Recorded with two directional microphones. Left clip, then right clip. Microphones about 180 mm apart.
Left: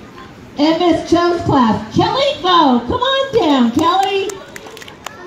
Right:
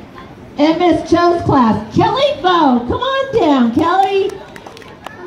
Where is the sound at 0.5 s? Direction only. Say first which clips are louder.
Right 1 dB; 20° left (ahead or behind).